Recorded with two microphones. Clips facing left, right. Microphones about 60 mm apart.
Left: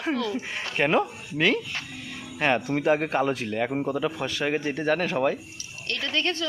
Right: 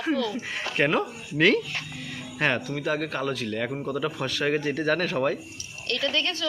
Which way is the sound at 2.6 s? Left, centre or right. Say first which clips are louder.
Left 5 dB; left.